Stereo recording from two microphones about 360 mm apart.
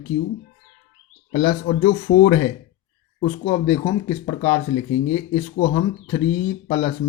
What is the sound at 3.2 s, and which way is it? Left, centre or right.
Speech, centre.